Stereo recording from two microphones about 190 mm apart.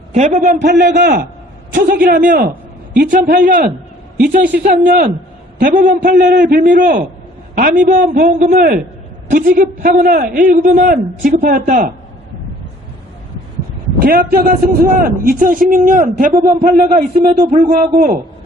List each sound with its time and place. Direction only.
0.1 s a man's voice: 40° right (ahead or behind)
14.0 s a man's voice: 50° right (ahead or behind)